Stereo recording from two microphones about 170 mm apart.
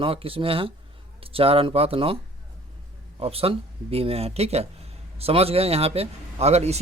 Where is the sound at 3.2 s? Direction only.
35° right (ahead or behind).